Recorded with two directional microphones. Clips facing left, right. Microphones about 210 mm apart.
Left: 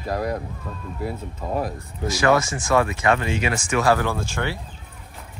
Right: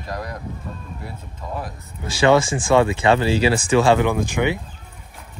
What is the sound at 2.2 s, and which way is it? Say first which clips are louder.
Speech: right 4 dB; 25° right (ahead or behind).